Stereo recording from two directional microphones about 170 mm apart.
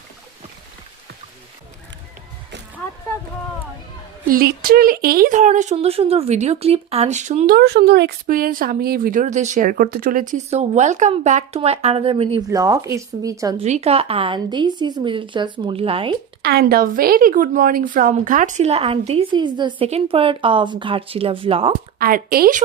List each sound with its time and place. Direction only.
4.3 s speech: 60° right (ahead or behind)
7.5 s speech: 70° right (ahead or behind); by 12.5 s 30° right (ahead or behind)
12.5 s speech: 20° right (ahead or behind)
13.6 s a woman's voice: 40° right (ahead or behind)
16.4 s a woman's voice: 70° right (ahead or behind); by 21.8 s 30° right (ahead or behind)
21.9 s a woman's voice: 60° right (ahead or behind)